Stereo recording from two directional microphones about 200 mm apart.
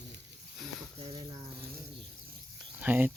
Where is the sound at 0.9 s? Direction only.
30° right (ahead or behind).